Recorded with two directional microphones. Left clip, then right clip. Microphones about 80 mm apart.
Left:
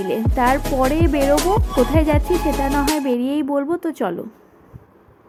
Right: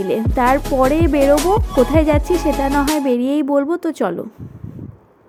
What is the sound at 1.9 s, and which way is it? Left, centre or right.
Music, right.